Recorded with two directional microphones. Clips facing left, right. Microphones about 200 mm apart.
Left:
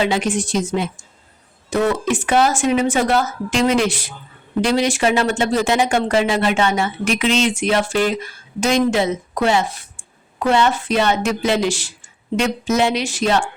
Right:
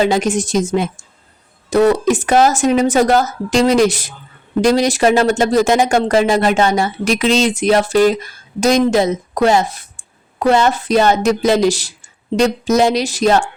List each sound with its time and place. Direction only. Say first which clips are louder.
0.0 s a woman's voice: right 4 dB; 40° right (ahead or behind)